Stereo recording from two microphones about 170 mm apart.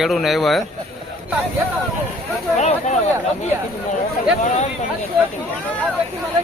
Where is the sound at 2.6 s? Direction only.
40° left (ahead or behind).